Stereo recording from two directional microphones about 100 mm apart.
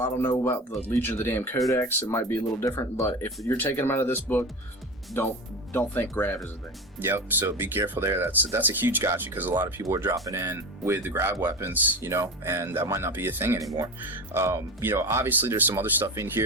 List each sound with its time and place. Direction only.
0.0 s speech: 20° left (ahead or behind)
7.0 s speech: 20° right (ahead or behind)
9.9 s speech: 30° right (ahead or behind)